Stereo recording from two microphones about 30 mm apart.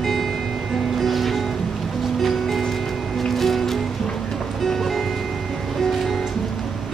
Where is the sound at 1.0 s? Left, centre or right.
Centre.